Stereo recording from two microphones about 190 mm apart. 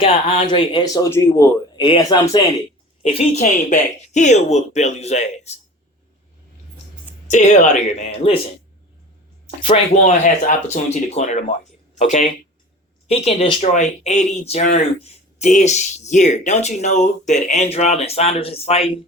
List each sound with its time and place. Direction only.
0.0 s speech: 30° left (ahead or behind)
3.0 s speech: 35° left (ahead or behind)
7.3 s speech: 40° left (ahead or behind)
9.6 s speech: 30° left (ahead or behind)